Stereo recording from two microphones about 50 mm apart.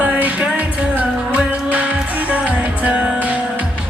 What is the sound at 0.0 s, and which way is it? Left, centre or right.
Music, right.